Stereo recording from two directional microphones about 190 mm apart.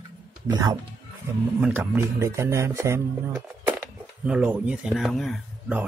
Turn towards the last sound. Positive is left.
turn(degrees=-5)  # may be behind; listen again after turning